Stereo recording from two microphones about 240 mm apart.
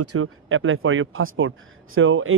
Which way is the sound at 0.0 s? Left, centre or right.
Right.